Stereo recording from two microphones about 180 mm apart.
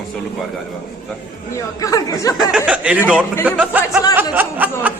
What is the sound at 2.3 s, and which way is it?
A man's voice, 5° right (ahead or behind).